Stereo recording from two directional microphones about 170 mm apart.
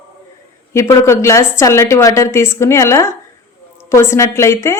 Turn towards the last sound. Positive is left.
turn(degrees=15)  # may be behind; listen again after turning